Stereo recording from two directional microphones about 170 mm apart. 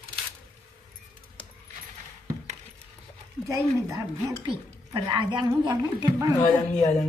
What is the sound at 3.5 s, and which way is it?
A woman's voice, 20° right (ahead or behind).